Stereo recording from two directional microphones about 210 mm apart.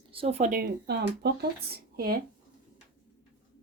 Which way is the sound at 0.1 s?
30° right (ahead or behind).